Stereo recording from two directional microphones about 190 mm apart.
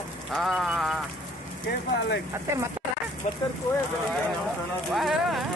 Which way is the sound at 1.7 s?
70° left (ahead or behind).